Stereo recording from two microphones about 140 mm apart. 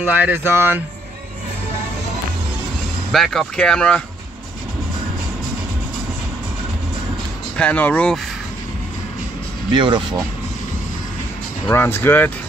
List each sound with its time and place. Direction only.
0.0 s speech: 10° right (ahead or behind)
3.1 s speech: centre (ahead or behind)
7.5 s speech: 10° left (ahead or behind)
9.7 s speech: 35° right (ahead or behind)
11.7 s speech: 15° left (ahead or behind)